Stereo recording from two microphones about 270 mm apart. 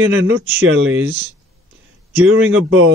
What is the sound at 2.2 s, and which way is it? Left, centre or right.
Speech, right.